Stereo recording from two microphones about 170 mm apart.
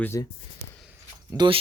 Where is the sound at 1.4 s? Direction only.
25° right (ahead or behind).